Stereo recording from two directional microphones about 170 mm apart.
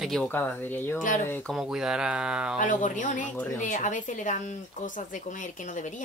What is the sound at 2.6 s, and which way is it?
Speech, 50° left (ahead or behind).